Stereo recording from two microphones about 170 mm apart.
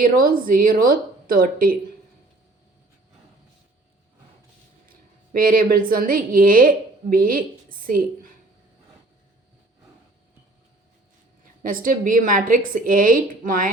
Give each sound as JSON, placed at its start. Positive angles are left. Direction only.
{"t": 0.0, "sound": "a woman's voice", "side_deg": -55}
{"t": 4.9, "sound": "a sound", "side_deg": -55}
{"t": 5.9, "sound": "a woman's voice", "side_deg": -55}
{"t": 11.6, "sound": "a woman's voice", "side_deg": -55}